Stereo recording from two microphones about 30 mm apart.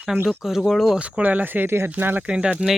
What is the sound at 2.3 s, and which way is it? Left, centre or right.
Speech, right.